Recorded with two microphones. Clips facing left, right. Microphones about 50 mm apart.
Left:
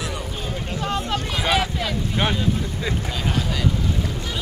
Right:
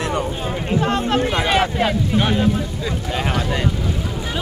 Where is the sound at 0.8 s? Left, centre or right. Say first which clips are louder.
Right 4 dB; right.